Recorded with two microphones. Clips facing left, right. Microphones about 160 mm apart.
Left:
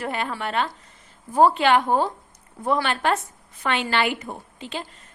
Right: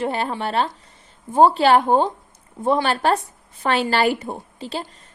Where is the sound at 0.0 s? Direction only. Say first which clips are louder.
Right 4 dB; 35° right (ahead or behind).